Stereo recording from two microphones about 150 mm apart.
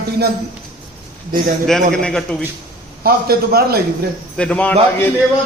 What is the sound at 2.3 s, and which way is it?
Speech, 10° left (ahead or behind).